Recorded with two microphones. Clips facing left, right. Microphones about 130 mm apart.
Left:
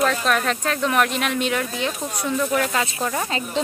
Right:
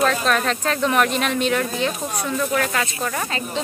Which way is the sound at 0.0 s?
5° left (ahead or behind).